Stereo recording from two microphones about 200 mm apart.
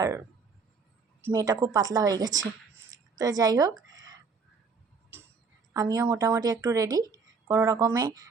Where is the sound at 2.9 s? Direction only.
15° right (ahead or behind).